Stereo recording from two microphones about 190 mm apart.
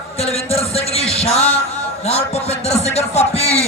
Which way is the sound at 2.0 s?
35° left (ahead or behind).